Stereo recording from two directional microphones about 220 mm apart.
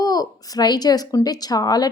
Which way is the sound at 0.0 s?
15° left (ahead or behind).